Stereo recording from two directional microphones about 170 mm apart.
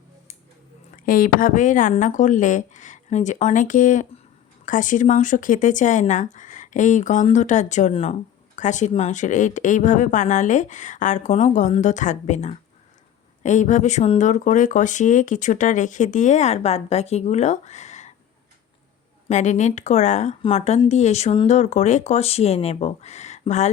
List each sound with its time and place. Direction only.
1.0 s speech: 55° left (ahead or behind)
19.3 s speech: 45° left (ahead or behind)